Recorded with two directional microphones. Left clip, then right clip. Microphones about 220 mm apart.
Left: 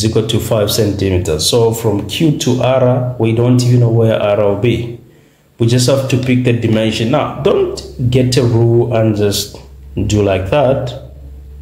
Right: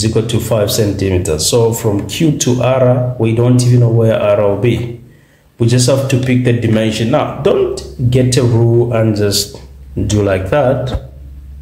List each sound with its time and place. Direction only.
0.0 s speech: 5° left (ahead or behind)